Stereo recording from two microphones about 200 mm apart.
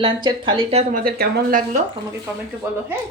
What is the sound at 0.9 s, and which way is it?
Speech, 45° right (ahead or behind).